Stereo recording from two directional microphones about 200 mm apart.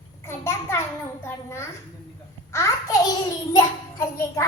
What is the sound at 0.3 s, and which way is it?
A child's voice, 15° left (ahead or behind).